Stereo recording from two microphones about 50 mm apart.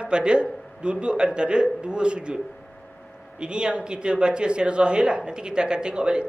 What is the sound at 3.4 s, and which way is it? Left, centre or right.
Speech, centre.